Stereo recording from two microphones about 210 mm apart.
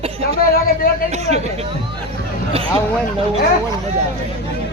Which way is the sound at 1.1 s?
30° right (ahead or behind).